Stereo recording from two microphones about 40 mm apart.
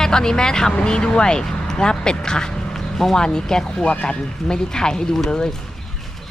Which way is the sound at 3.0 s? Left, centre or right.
Centre.